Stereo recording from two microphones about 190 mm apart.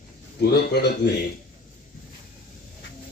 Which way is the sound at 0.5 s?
60° left (ahead or behind).